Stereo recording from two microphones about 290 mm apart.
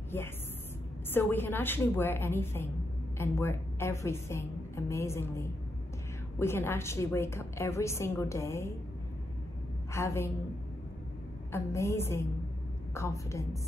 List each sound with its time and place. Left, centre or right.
0.1 s a woman's voice: centre
9.9 s a woman's voice: centre
11.5 s a woman's voice: centre